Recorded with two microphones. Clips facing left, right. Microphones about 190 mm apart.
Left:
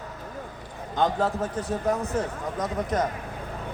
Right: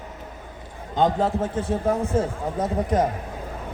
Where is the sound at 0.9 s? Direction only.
25° right (ahead or behind).